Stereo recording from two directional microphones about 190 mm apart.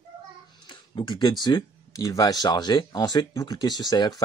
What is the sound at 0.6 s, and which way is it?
Speech, 25° left (ahead or behind).